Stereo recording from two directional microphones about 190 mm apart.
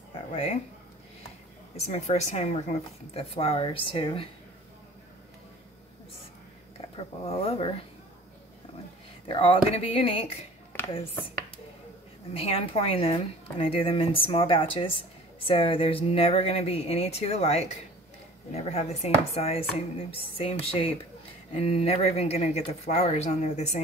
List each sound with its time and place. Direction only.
0.3 s speech: 30° left (ahead or behind)
1.9 s speech: 35° left (ahead or behind)
7.0 s speech: 30° left (ahead or behind)
9.3 s a woman's voice: 30° left (ahead or behind)
12.4 s a woman's voice: 30° left (ahead or behind)